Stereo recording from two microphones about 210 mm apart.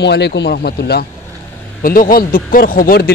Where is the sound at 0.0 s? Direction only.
55° left (ahead or behind).